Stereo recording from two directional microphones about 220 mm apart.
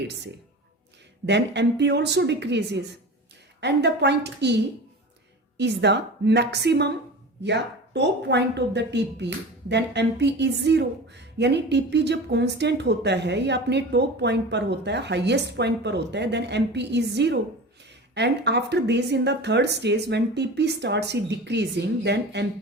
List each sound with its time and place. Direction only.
0.0 s a woman's voice: 50° right (ahead or behind)
1.3 s a woman's voice: 50° right (ahead or behind)